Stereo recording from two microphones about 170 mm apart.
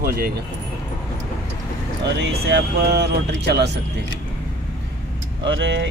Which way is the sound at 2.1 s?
90° right.